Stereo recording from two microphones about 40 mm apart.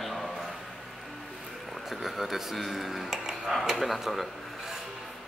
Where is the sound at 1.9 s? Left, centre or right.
Centre.